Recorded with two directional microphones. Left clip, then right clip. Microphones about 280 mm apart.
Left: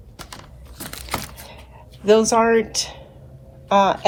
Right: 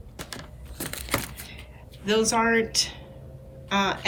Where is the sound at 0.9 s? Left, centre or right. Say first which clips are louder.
Left 1 dB; centre.